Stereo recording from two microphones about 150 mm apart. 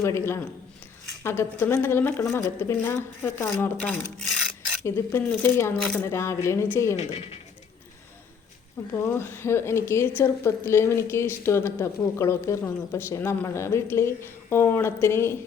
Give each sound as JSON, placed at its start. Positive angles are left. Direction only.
{"t": 0.0, "sound": "speech", "side_deg": 15}
{"t": 5.7, "sound": "speech", "side_deg": 5}
{"t": 6.1, "sound": "speech", "side_deg": 20}
{"t": 7.0, "sound": "speech", "side_deg": 45}
{"t": 8.9, "sound": "speech", "side_deg": 15}